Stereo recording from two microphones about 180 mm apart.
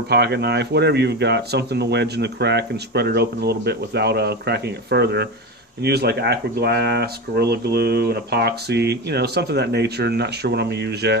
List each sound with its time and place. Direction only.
0.1 s speech: 65° right (ahead or behind)